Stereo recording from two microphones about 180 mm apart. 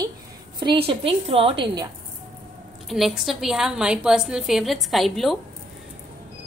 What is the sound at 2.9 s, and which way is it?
A woman's voice, centre (ahead or behind).